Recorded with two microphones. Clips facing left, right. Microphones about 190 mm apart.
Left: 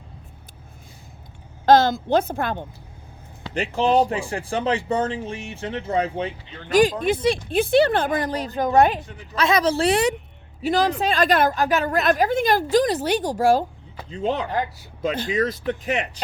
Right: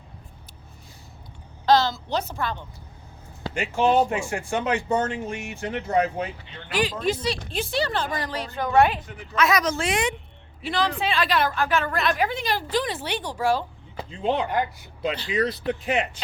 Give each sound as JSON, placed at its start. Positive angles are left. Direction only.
{"t": 1.6, "sound": "a woman's voice", "side_deg": 50}
{"t": 3.8, "sound": "a woman's voice", "side_deg": 35}
{"t": 6.7, "sound": "a woman's voice", "side_deg": 45}
{"t": 7.0, "sound": "a woman's voice", "side_deg": 55}
{"t": 9.0, "sound": "a woman's voice", "side_deg": 30}